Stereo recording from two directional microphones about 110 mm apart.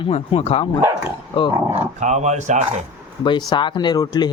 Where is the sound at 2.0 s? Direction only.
90° right.